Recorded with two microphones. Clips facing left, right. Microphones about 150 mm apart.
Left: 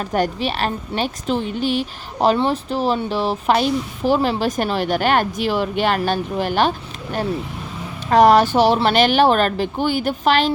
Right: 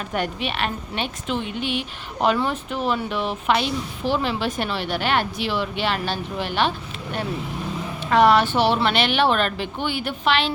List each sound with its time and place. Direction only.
0.1 s speech: 35° left (ahead or behind)